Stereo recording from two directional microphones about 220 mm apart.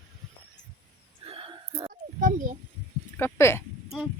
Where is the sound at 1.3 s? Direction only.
25° right (ahead or behind).